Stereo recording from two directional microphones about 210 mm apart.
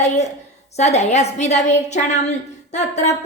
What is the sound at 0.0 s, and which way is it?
A woman's voice, 35° left (ahead or behind).